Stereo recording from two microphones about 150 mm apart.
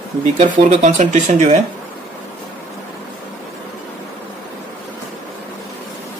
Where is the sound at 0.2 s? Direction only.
50° right (ahead or behind).